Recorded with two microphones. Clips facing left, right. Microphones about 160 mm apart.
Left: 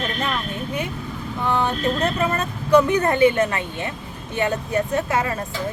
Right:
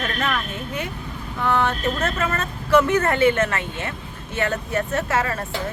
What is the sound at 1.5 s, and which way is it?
Speech, 15° left (ahead or behind).